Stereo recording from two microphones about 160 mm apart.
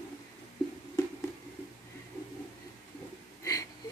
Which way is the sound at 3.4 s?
20° left (ahead or behind).